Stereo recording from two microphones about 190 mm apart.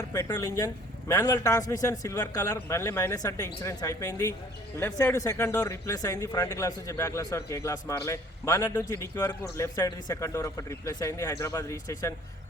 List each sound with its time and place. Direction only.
0.1 s speech: 15° left (ahead or behind)